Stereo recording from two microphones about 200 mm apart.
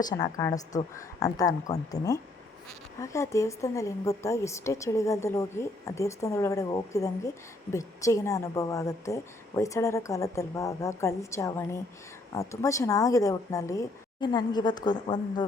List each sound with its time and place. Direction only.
0.0 s speech: 20° left (ahead or behind)